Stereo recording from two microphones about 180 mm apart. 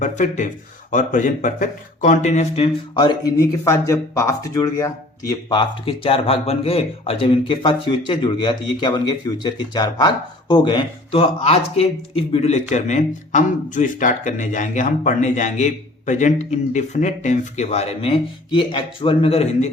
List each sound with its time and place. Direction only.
0.0 s speech: 45° left (ahead or behind)
2.9 s speech: 25° left (ahead or behind)
3.6 s speech: 15° left (ahead or behind); by 19.7 s 35° left (ahead or behind)